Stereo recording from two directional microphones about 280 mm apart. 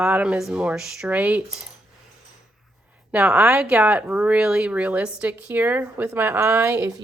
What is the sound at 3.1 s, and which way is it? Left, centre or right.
A woman's voice, centre.